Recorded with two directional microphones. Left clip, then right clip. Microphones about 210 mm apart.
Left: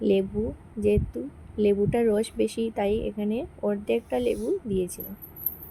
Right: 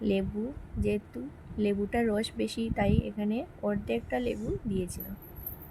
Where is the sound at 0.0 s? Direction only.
10° left (ahead or behind).